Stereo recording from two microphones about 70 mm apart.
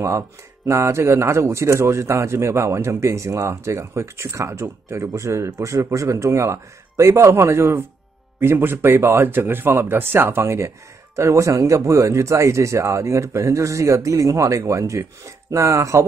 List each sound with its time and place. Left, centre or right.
0.7 s a man's voice: right